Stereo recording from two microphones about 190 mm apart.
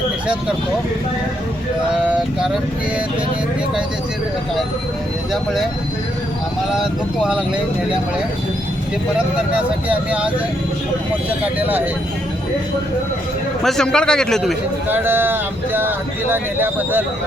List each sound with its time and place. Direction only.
6.7 s speech: centre (ahead or behind)
9.1 s speech: 5° right (ahead or behind)
13.7 s speech: 5° left (ahead or behind)
14.8 s speech: 10° right (ahead or behind)